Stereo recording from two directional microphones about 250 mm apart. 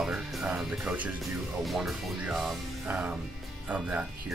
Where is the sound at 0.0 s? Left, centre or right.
Centre.